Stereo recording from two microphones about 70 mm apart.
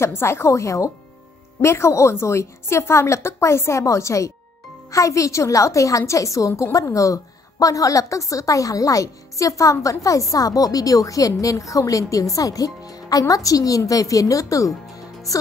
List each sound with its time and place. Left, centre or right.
0.0 s a woman's voice: left